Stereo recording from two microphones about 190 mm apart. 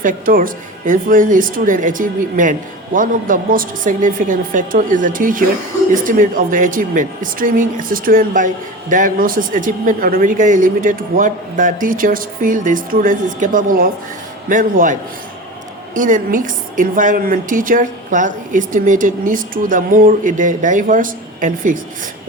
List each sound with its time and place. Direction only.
0.0 s speech: 45° right (ahead or behind)
16.0 s speech: 45° right (ahead or behind)